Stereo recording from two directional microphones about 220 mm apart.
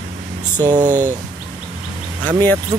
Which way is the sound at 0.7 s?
35° right (ahead or behind).